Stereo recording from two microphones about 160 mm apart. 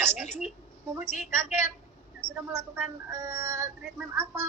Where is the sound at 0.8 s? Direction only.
15° right (ahead or behind).